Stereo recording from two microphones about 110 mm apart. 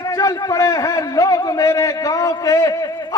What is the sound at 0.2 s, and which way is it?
A man's voice, 30° left (ahead or behind).